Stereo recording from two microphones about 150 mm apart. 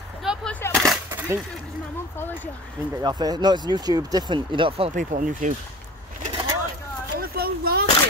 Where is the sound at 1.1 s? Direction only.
20° right (ahead or behind).